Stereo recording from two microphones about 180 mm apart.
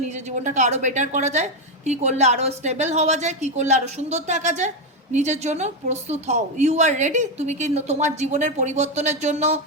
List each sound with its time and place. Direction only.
0.0 s a woman's voice: 40° right (ahead or behind)